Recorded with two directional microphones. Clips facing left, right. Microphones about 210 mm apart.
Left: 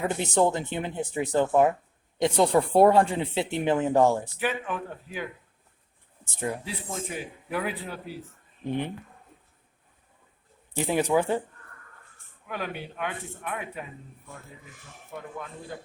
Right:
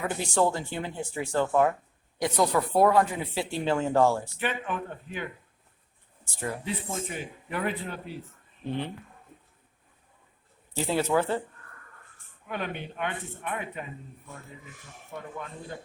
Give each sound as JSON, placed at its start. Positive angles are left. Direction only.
{"t": 0.0, "sound": "speech", "side_deg": 20}
{"t": 4.4, "sound": "a man's voice", "side_deg": 5}
{"t": 6.2, "sound": "speech", "side_deg": 20}
{"t": 6.7, "sound": "a man's voice", "side_deg": 0}
{"t": 8.6, "sound": "speech", "side_deg": 15}
{"t": 10.8, "sound": "speech", "side_deg": 15}
{"t": 12.5, "sound": "a man's voice", "side_deg": 5}